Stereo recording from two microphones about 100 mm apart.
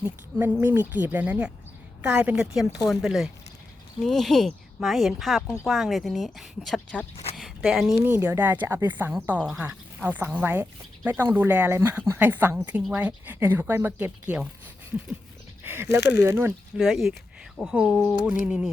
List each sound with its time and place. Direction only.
0.3 s speech: 20° right (ahead or behind); by 7.9 s 5° right (ahead or behind)
8.0 s speech: 20° right (ahead or behind)
15.6 s speech: 25° right (ahead or behind)
16.7 s speech: centre (ahead or behind)
17.9 s speech: 15° left (ahead or behind)
18.3 s speech: 10° right (ahead or behind)